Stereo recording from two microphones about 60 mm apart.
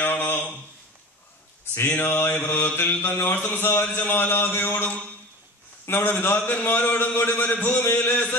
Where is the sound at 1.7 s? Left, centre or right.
Left.